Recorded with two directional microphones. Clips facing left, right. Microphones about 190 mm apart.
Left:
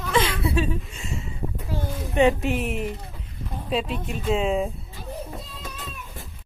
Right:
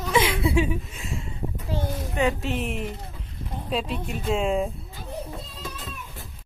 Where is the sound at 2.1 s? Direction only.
20° left (ahead or behind).